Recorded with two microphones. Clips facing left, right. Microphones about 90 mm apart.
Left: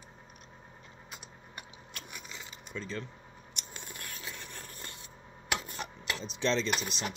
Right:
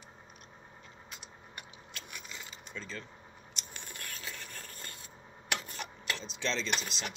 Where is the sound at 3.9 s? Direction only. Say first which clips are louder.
Even; 15° left (ahead or behind).